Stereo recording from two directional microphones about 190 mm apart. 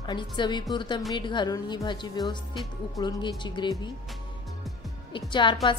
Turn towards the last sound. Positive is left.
turn(degrees=25)  # may be behind; listen again after turning